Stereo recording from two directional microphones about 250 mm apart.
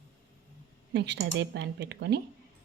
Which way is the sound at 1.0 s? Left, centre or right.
Right.